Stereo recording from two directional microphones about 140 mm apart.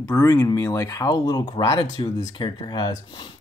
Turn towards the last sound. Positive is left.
turn(degrees=30)  # may be behind; listen again after turning